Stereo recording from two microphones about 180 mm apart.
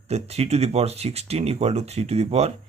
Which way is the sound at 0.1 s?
35° right (ahead or behind).